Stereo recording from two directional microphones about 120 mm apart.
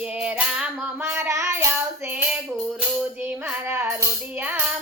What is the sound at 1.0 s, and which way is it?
Child singing, 20° right (ahead or behind).